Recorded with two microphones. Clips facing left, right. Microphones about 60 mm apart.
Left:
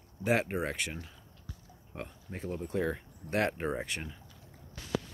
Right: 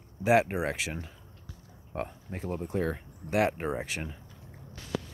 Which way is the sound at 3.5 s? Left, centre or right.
Right.